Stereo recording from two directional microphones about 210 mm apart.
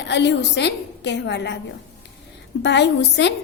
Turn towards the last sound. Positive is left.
turn(degrees=55)  # may be behind; listen again after turning